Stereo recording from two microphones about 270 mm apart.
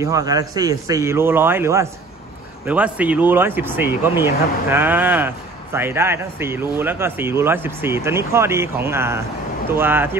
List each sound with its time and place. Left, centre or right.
0.0 s speech: centre